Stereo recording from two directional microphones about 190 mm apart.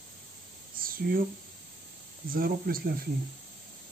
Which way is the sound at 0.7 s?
50° right (ahead or behind).